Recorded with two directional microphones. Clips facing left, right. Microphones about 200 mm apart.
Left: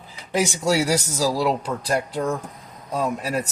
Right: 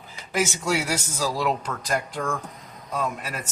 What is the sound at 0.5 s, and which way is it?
Speech, 40° left (ahead or behind).